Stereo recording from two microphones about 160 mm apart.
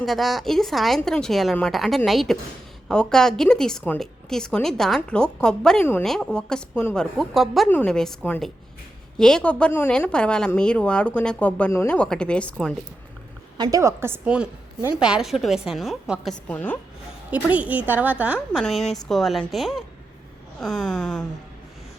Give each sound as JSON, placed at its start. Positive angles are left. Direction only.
{"t": 0.0, "sound": "a woman's voice", "side_deg": 0}
{"t": 13.6, "sound": "a woman's voice", "side_deg": -20}
{"t": 16.5, "sound": "a woman's voice", "side_deg": 10}
{"t": 17.3, "sound": "a woman's voice", "side_deg": -10}